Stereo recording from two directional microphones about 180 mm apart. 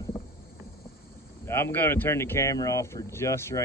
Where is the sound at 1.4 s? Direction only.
15° left (ahead or behind).